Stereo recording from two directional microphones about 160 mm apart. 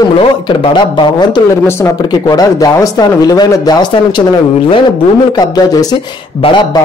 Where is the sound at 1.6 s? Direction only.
15° left (ahead or behind).